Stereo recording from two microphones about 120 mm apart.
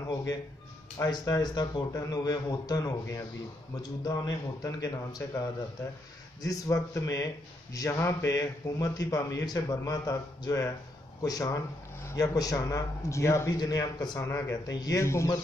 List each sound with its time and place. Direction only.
1.0 s a man's voice: 35° left (ahead or behind)